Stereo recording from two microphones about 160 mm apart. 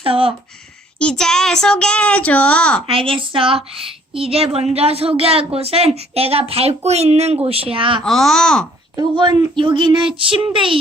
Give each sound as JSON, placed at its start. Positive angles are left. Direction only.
{"t": 0.0, "sound": "a woman's voice", "side_deg": -35}
{"t": 0.9, "sound": "a child's voice", "side_deg": 5}
{"t": 2.8, "sound": "a woman's voice", "side_deg": -35}
{"t": 8.0, "sound": "speech", "side_deg": 0}
{"t": 9.0, "sound": "a woman's voice", "side_deg": -25}